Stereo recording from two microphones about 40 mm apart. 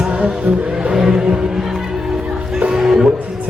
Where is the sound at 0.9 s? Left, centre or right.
Centre.